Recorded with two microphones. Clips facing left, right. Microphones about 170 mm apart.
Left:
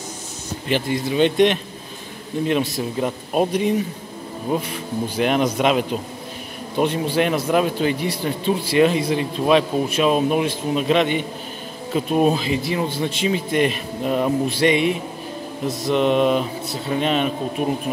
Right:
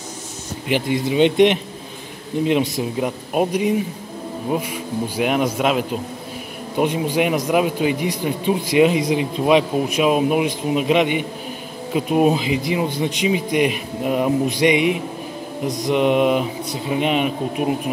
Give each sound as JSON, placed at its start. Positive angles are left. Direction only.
{"t": 0.7, "sound": "a man's voice", "side_deg": -15}
{"t": 6.8, "sound": "a man's voice", "side_deg": -15}